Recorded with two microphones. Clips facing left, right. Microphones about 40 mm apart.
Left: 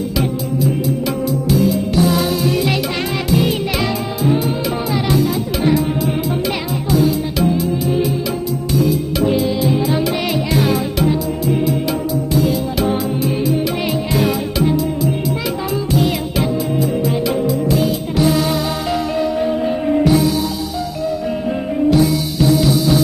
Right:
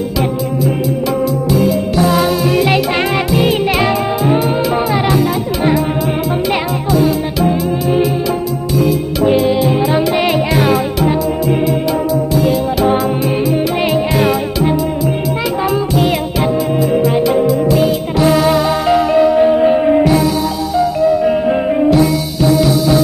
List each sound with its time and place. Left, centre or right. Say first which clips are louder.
1.5 s music: right 1 dB; centre
6.9 s music: right 2 dB; centre
9.6 s music: right 4 dB; right
10.5 s music: right 4 dB; centre
14.1 s music: right 3 dB; centre
17.5 s music: right 4 dB; centre
19.4 s music: right 8 dB; right
20.0 s music: right 2 dB; centre
21.5 s music: right 5 dB; right
21.9 s music: right 2 dB; centre